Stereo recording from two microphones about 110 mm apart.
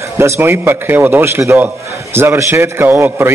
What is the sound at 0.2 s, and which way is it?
A man's voice, 20° right (ahead or behind).